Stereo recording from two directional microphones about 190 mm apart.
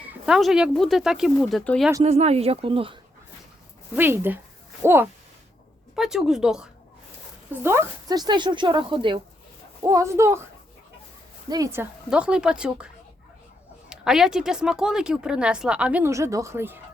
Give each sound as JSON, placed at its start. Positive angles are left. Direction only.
{"t": 0.0, "sound": "speech", "side_deg": -5}
{"t": 2.0, "sound": "speech", "side_deg": -35}
{"t": 3.9, "sound": "speech", "side_deg": -10}
{"t": 7.6, "sound": "speech", "side_deg": -15}
{"t": 11.4, "sound": "speech", "side_deg": -20}
{"t": 13.9, "sound": "speech", "side_deg": -5}